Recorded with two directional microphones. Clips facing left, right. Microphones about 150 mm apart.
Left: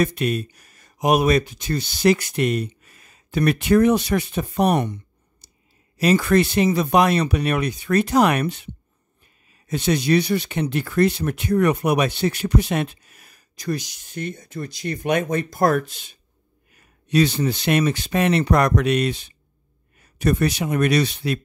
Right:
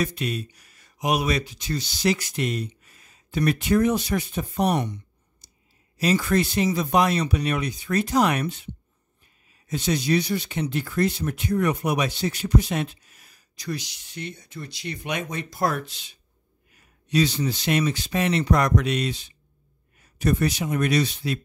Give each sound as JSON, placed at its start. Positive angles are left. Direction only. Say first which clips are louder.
{"t": 0.0, "sound": "speech", "louder": "left 6 dB", "side_deg": 55}
{"t": 9.7, "sound": "speech", "louder": "left 4 dB", "side_deg": 65}